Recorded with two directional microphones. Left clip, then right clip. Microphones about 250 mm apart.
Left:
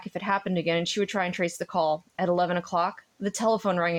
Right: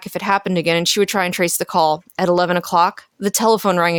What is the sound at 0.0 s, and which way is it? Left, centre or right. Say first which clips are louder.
A woman's voice: right 9 dB; right.